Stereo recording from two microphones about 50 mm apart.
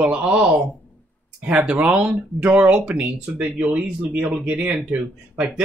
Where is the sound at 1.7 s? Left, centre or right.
Right.